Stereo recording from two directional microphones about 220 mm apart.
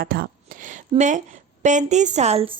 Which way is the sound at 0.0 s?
40° right (ahead or behind).